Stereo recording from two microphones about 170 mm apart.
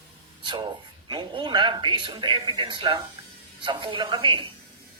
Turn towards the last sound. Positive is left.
turn(degrees=-30)  # may be behind; listen again after turning